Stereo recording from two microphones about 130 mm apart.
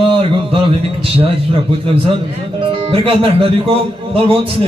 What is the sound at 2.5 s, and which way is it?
A man's voice, 45° right (ahead or behind).